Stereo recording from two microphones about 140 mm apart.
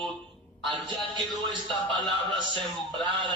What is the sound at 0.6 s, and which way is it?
Speech, 35° right (ahead or behind).